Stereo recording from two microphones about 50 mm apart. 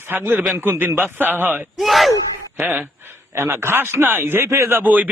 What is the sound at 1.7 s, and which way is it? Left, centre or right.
Speech, centre.